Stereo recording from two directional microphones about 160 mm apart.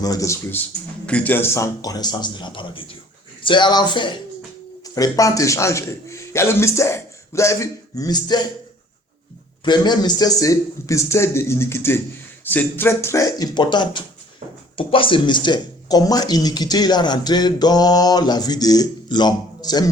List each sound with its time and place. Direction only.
0.0 s a man's voice: 20° left (ahead or behind)
9.6 s speech: 25° left (ahead or behind)